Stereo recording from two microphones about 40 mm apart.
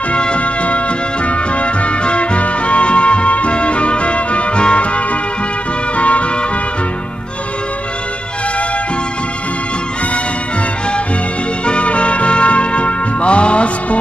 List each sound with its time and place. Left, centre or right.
0.1 s music: left
11.6 s music: left